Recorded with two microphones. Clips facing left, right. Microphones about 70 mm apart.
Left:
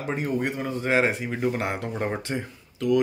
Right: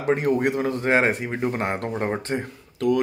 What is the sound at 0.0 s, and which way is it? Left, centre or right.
Speech, right.